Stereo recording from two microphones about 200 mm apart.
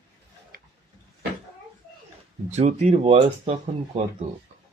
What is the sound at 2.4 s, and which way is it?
Speech, 35° right (ahead or behind).